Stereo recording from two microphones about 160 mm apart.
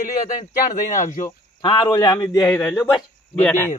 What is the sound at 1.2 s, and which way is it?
Speech, 30° left (ahead or behind).